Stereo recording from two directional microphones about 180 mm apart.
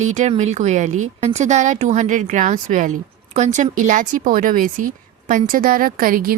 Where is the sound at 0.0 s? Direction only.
40° right (ahead or behind).